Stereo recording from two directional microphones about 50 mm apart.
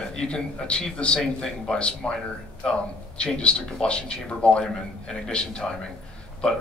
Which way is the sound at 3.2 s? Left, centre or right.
Left.